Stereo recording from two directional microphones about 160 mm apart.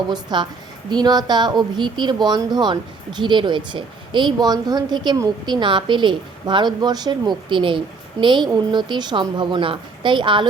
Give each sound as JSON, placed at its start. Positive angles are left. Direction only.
{"t": 0.1, "sound": "a woman's voice", "side_deg": -30}